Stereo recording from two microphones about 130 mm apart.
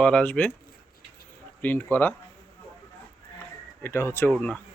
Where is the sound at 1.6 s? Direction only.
15° left (ahead or behind).